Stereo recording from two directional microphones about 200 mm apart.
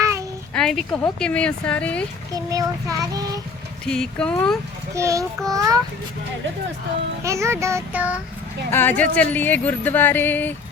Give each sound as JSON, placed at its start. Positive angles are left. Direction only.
{"t": 0.0, "sound": "a sound", "side_deg": -15}
{"t": 0.5, "sound": "a sound", "side_deg": 0}
{"t": 1.2, "sound": "speech", "side_deg": 5}
{"t": 2.3, "sound": "child singing", "side_deg": -15}
{"t": 3.8, "sound": "speech", "side_deg": 5}
{"t": 4.9, "sound": "child singing", "side_deg": -15}
{"t": 7.3, "sound": "child singing", "side_deg": -15}
{"t": 8.7, "sound": "speech", "side_deg": 10}